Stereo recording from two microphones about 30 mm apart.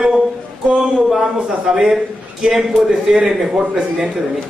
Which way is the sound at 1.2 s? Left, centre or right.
Right.